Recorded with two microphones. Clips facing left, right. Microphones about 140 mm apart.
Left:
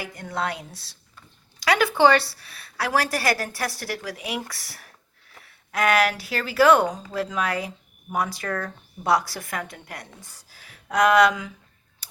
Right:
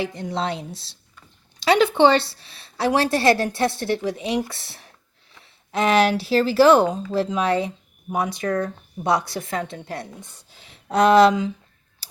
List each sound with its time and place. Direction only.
0.0 s speech: 25° right (ahead or behind)